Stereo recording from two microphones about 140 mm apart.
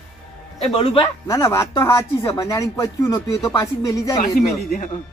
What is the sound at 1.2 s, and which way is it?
Speech, 25° left (ahead or behind).